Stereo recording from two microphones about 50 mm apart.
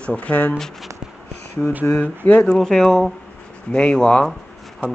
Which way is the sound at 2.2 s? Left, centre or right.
Left.